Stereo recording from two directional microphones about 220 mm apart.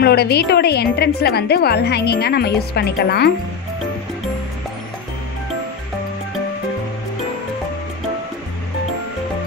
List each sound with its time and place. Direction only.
0.0 s a woman's voice: 45° left (ahead or behind)